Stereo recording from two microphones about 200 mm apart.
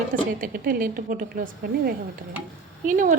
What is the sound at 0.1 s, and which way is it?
A woman's voice, 45° right (ahead or behind).